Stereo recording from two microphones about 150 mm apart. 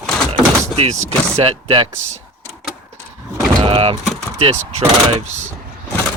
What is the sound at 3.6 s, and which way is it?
Speech, 40° right (ahead or behind).